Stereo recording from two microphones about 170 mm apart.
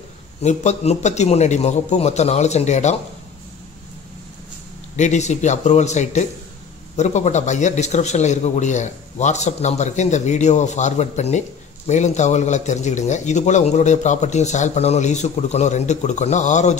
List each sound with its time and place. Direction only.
0.4 s a man's voice: 40° left (ahead or behind)
4.9 s a man's voice: 45° left (ahead or behind)